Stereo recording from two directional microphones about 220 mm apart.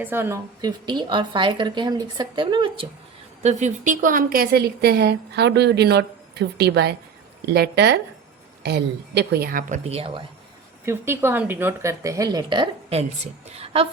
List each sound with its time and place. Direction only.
0.0 s speech: 10° right (ahead or behind)
3.4 s a woman's voice: 35° right (ahead or behind)
10.8 s speech: 10° right (ahead or behind); by 13.8 s 25° right (ahead or behind)